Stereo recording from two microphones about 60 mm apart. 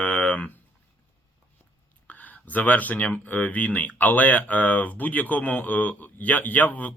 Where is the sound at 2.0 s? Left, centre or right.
Left.